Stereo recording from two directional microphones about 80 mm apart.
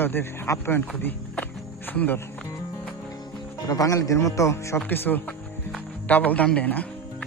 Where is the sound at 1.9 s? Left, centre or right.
Left.